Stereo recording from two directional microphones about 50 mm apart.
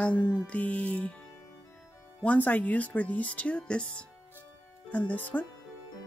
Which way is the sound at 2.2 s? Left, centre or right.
Left.